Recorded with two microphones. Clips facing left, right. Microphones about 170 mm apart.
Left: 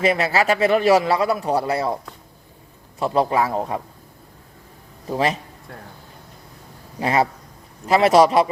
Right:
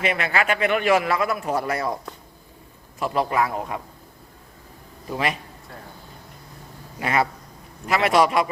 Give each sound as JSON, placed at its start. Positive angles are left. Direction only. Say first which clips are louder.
{"t": 0.0, "sound": "a man's voice", "louder": "left 5 dB", "side_deg": 35}
{"t": 3.0, "sound": "a man's voice", "louder": "left 3 dB", "side_deg": 30}
{"t": 5.0, "sound": "a man's voice", "louder": "left 4 dB", "side_deg": 30}
{"t": 7.0, "sound": "a man's voice", "louder": "left 3 dB", "side_deg": 30}